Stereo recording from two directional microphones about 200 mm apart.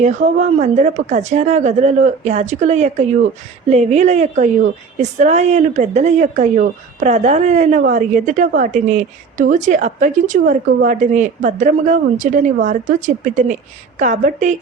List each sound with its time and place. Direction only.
0.0 s a woman's voice: 35° right (ahead or behind)